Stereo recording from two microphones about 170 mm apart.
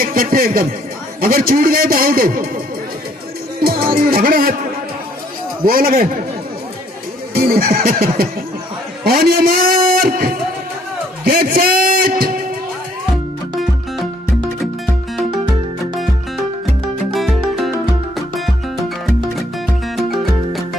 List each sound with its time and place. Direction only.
0.0 s a man's voice: 60° right (ahead or behind)
3.5 s music: 60° right (ahead or behind)
5.6 s a man's voice: 55° right (ahead or behind)
7.3 s a man's voice: 60° right (ahead or behind)
11.2 s a sound: 60° right (ahead or behind)
15.1 s music: centre (ahead or behind)
20.0 s music: centre (ahead or behind)